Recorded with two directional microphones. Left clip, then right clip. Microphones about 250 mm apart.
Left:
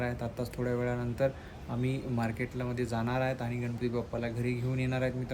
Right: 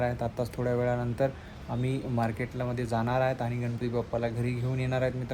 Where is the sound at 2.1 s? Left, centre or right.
Centre.